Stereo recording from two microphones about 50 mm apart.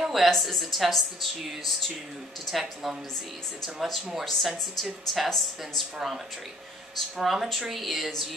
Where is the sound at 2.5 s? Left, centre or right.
Centre.